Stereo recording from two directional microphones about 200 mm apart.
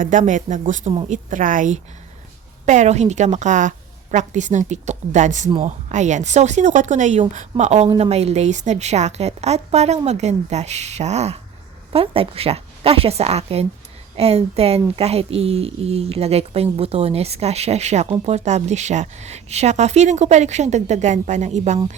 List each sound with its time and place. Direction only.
0.0 s speech: 40° right (ahead or behind)